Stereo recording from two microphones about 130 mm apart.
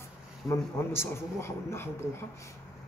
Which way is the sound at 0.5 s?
20° left (ahead or behind).